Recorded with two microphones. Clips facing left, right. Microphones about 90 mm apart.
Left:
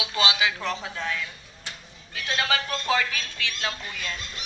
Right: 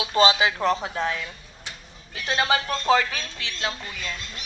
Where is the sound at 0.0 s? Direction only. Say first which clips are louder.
Right 6 dB; 35° right (ahead or behind).